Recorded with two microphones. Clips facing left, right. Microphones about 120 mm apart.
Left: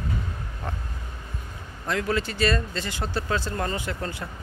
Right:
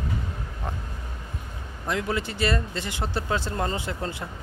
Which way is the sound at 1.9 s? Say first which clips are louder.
Left 1 dB; 20° right (ahead or behind).